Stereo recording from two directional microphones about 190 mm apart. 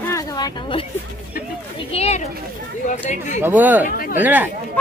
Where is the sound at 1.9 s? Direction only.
35° left (ahead or behind).